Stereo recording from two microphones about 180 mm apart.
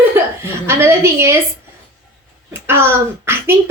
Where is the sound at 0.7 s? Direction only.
15° right (ahead or behind).